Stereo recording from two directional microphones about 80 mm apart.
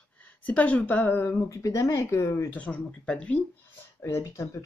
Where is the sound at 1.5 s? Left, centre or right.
Left.